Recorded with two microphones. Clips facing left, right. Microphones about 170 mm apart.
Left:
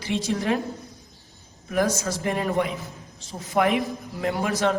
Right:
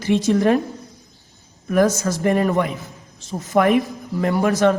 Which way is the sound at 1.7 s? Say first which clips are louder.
Right 6 dB; 50° right (ahead or behind).